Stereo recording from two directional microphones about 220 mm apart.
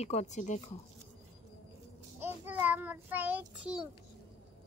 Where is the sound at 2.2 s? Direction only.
10° right (ahead or behind).